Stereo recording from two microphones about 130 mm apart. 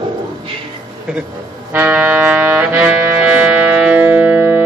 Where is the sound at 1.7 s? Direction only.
15° right (ahead or behind).